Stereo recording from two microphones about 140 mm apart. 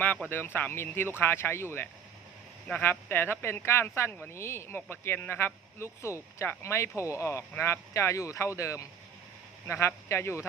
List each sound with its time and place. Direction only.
0.3 s speech: 15° left (ahead or behind)
2.6 s speech: 15° left (ahead or behind)